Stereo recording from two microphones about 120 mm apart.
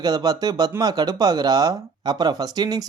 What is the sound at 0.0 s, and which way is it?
Speech, 35° right (ahead or behind).